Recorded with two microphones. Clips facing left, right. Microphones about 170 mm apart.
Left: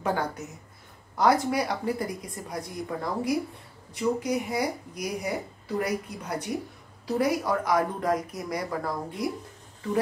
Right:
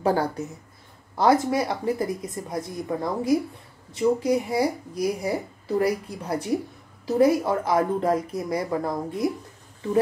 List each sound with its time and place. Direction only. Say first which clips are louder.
1.1 s speech: right 3 dB; 25° right (ahead or behind)